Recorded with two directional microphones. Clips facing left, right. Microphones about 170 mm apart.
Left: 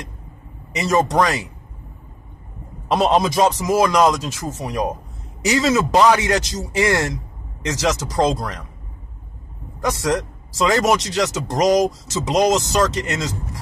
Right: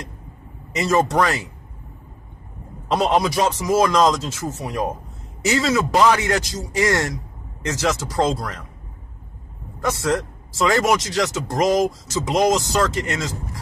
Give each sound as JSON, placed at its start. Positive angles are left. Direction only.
{"t": 0.7, "sound": "speech", "side_deg": 15}
{"t": 2.9, "sound": "speech", "side_deg": 20}
{"t": 9.8, "sound": "speech", "side_deg": 15}